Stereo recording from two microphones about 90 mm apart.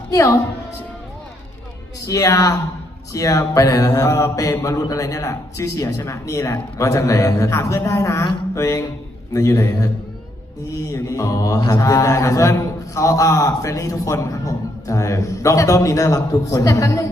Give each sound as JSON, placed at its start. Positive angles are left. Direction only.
{"t": 0.1, "sound": "a woman's voice", "side_deg": 40}
{"t": 2.0, "sound": "mantra", "side_deg": 35}